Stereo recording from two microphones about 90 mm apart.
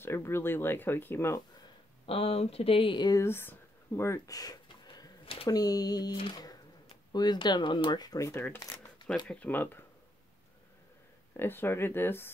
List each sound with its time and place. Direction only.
0.0 s speech: 25° left (ahead or behind)
2.0 s speech: 90° left; by 3.1 s 65° left (ahead or behind)
3.1 s speech: 30° left (ahead or behind)
4.8 s a sound: 50° left (ahead or behind)
5.2 s a sound: 90° left
5.5 s speech: 45° left (ahead or behind)
6.3 s a sound: 45° left (ahead or behind)
7.1 s speech: 50° left (ahead or behind)
8.2 s speech: 35° left (ahead or behind)
8.5 s shuffling cards: 40° left (ahead or behind)
9.3 s speech: 15° left (ahead or behind)
11.3 s speech: 25° left (ahead or behind)